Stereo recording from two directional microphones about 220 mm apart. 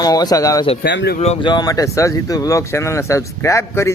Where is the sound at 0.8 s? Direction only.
50° left (ahead or behind).